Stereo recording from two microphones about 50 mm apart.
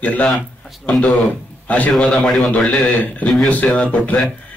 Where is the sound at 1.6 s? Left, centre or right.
Left.